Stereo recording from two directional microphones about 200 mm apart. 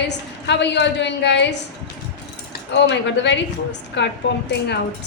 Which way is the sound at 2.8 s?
65° left (ahead or behind).